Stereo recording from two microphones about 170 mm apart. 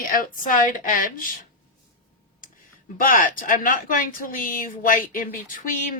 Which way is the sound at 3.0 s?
55° left (ahead or behind).